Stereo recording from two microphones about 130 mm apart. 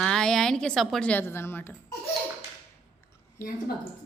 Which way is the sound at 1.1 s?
15° left (ahead or behind).